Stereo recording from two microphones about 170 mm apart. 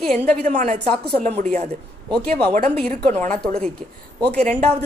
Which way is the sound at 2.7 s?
10° left (ahead or behind).